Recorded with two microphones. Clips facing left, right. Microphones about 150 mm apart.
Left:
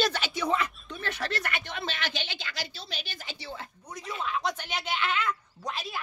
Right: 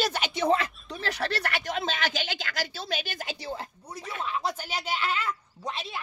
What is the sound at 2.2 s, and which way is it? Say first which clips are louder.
A woman's voice: right 5 dB; 45° right (ahead or behind).